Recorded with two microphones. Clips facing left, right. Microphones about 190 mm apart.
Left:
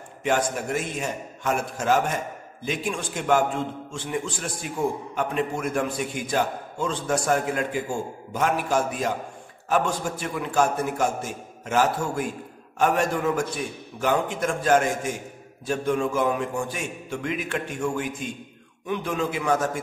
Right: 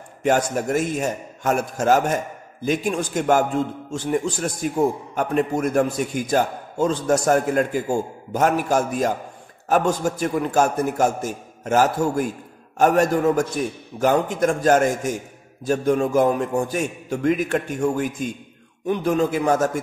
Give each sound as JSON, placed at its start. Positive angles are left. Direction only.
{"t": 0.2, "sound": "a man's voice", "side_deg": -45}